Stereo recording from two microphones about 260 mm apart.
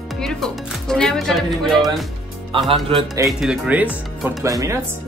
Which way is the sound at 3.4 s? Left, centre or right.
Centre.